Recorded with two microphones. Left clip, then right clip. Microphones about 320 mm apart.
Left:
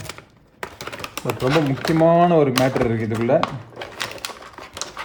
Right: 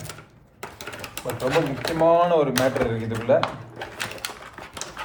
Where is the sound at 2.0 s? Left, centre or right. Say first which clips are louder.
Left 2 dB; left.